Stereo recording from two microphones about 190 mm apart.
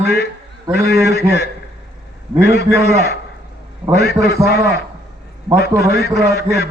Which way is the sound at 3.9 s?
55° left (ahead or behind).